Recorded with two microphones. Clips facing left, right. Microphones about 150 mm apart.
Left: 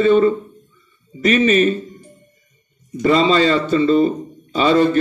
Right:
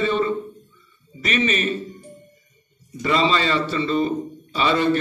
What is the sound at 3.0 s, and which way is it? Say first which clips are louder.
A man's voice: left 6 dB; 40° left (ahead or behind).